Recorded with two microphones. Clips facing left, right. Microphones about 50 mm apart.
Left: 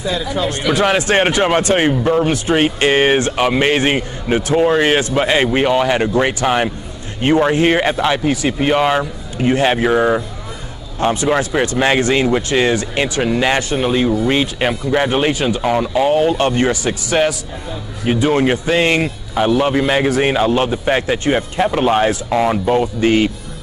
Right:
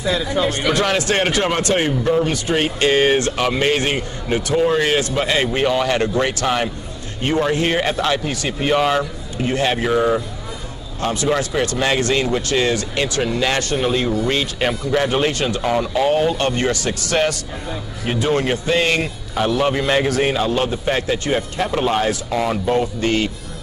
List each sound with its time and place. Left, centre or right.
0.4 s speech: centre
0.7 s a man's voice: centre